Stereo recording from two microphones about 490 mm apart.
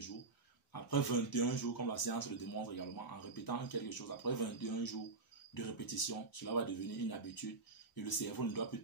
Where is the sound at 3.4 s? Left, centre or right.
Left.